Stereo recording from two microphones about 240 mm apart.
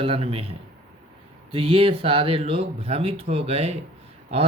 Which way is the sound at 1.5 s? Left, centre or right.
Right.